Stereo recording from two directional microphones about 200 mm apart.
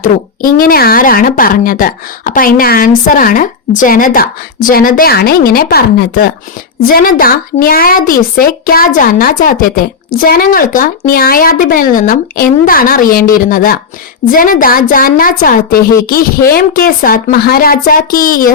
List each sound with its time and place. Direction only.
0.0 s speech: 45° left (ahead or behind)